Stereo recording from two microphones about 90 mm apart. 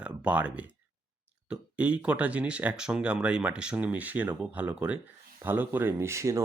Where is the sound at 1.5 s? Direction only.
15° right (ahead or behind).